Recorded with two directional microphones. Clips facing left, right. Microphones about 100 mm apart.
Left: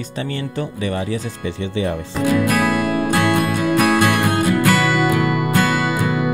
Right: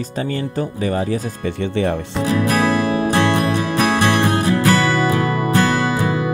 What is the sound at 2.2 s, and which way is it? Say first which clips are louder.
Music: even; 25° right (ahead or behind).